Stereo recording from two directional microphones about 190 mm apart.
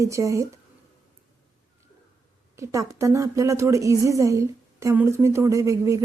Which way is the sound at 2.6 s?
15° right (ahead or behind).